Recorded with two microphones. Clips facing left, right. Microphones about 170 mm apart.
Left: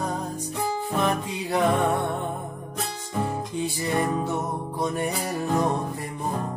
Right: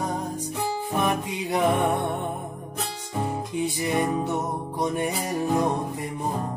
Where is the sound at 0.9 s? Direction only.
15° right (ahead or behind).